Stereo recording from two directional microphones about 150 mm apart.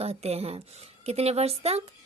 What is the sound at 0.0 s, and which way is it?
A woman's voice, 45° right (ahead or behind).